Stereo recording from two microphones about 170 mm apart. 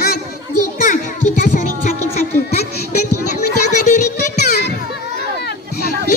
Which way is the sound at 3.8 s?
45° left (ahead or behind).